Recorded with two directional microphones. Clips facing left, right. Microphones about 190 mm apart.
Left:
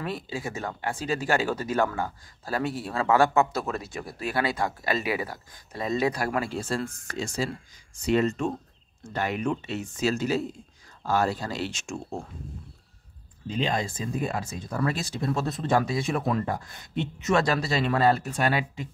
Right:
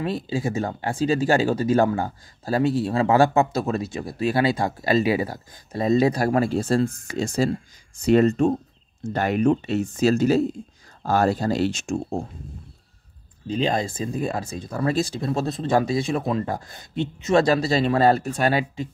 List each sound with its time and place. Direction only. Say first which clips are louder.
0.0 s speech: right 7 dB; 30° right (ahead or behind)
13.5 s speech: right 5 dB; 35° right (ahead or behind)